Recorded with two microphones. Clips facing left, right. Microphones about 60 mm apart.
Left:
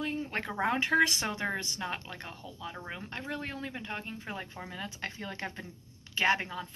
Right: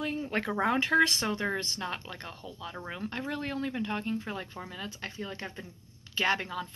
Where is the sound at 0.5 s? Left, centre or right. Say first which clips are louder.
Right 1 dB; centre.